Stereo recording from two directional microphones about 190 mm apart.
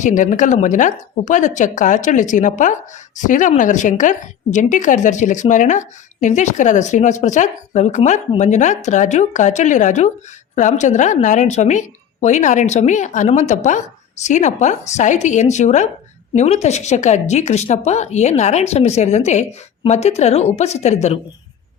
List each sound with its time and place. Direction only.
0.0 s a woman's voice: 40° left (ahead or behind)